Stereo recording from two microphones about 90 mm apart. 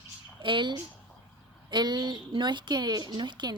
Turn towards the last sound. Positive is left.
turn(degrees=-60)  # may be behind; listen again after turning